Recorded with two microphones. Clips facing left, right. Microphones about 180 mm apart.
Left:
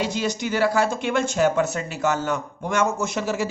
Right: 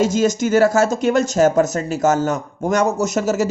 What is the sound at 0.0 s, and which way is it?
Speech, 45° right (ahead or behind).